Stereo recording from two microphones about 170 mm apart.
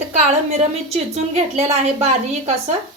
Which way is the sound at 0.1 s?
40° right (ahead or behind).